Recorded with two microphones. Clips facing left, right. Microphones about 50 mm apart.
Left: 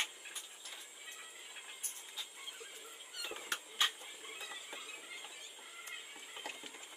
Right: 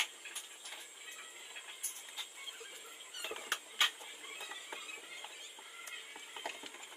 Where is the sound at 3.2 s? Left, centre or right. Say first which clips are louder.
Right 1 dB; right.